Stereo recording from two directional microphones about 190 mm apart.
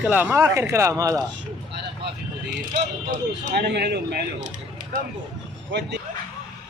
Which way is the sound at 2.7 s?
50° right (ahead or behind).